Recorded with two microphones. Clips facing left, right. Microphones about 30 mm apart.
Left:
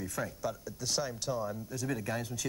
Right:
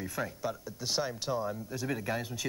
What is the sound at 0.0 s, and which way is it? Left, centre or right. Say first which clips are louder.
Speech: right 1 dB; right.